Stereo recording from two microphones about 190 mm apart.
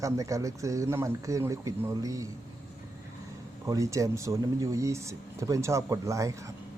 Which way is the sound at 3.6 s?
15° right (ahead or behind).